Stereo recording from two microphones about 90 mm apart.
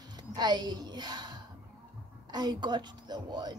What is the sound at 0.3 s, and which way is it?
A woman's voice, 50° right (ahead or behind).